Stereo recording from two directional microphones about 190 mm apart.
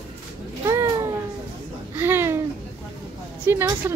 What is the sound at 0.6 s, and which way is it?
Cat, 15° right (ahead or behind).